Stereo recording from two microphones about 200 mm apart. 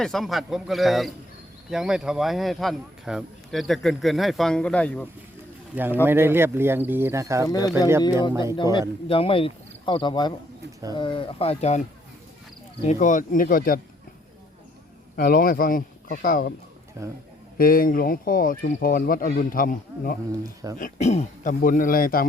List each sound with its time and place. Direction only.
0.0 s speech: centre (ahead or behind)
5.7 s speech: 10° right (ahead or behind)
7.4 s speech: 20° left (ahead or behind)
12.8 s speech: 35° left (ahead or behind)
15.1 s a man's voice: 50° left (ahead or behind)
17.0 s speech: 15° right (ahead or behind)
17.6 s speech: 45° left (ahead or behind)
20.4 s speech: 15° right (ahead or behind)
20.7 s a man's voice: 40° left (ahead or behind)